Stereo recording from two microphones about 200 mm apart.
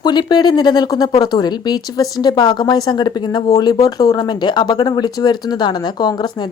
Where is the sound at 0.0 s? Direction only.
20° left (ahead or behind).